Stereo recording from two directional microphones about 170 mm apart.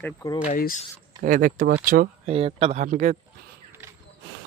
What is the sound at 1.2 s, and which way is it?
Speech, 50° right (ahead or behind).